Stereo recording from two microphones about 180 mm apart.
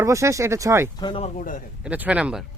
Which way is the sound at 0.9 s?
30° left (ahead or behind).